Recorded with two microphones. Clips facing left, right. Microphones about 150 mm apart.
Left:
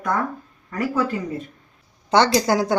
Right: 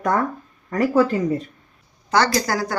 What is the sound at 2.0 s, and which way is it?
Speech, 25° left (ahead or behind).